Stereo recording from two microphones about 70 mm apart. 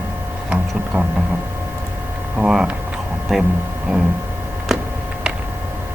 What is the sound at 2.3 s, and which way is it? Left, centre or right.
Speech, centre.